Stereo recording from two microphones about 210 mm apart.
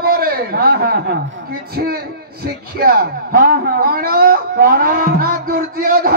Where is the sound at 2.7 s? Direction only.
45° right (ahead or behind).